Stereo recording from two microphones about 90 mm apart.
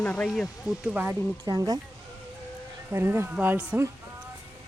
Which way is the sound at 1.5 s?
45° right (ahead or behind).